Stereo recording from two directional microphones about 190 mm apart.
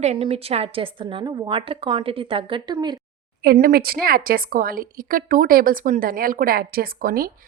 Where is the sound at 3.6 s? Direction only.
50° right (ahead or behind).